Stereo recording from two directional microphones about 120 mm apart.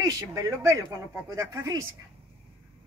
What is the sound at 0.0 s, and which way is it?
Speech, 30° right (ahead or behind).